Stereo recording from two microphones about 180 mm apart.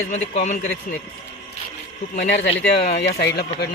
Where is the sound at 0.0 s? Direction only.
40° left (ahead or behind).